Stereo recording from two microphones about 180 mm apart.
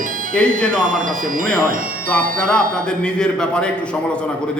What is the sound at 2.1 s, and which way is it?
Music, 5° left (ahead or behind).